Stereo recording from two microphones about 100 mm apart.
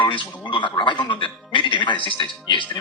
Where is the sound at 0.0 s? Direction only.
55° left (ahead or behind).